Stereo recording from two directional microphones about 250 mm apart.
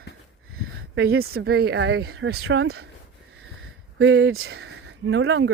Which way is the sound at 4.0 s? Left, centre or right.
Right.